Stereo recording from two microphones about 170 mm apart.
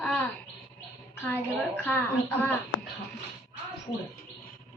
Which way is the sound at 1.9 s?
10° left (ahead or behind).